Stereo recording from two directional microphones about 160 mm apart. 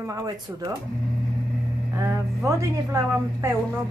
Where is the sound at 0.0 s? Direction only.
20° right (ahead or behind).